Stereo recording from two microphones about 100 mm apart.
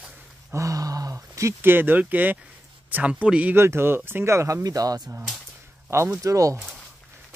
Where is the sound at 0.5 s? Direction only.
35° right (ahead or behind); by 3.5 s 15° right (ahead or behind).